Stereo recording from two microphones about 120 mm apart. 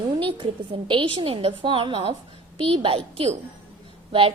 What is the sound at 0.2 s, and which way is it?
A woman's voice, 45° right (ahead or behind).